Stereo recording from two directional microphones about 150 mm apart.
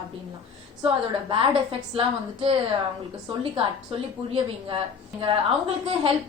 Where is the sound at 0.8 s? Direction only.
35° right (ahead or behind).